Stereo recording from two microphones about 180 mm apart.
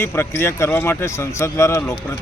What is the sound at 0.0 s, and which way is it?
A man's voice, 15° left (ahead or behind).